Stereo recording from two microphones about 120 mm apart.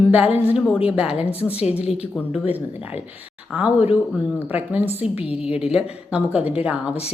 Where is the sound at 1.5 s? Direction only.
60° left (ahead or behind).